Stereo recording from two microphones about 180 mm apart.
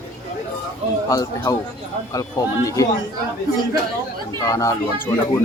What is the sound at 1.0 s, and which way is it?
Speech, 20° left (ahead or behind).